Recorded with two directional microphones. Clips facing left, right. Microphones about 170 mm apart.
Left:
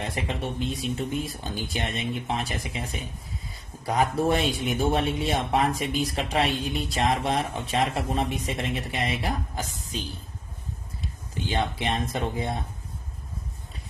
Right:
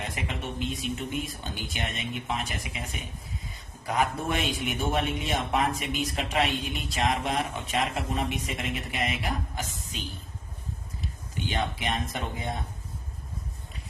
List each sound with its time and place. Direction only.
0.0 s a man's voice: 35° left (ahead or behind)
11.4 s speech: 30° left (ahead or behind)